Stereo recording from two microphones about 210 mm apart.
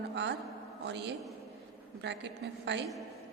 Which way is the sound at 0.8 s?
55° right (ahead or behind).